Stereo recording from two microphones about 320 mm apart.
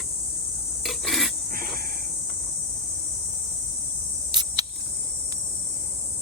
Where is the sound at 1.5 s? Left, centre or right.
Right.